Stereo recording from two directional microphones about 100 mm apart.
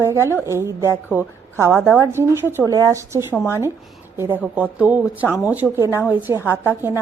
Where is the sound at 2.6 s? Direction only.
40° right (ahead or behind).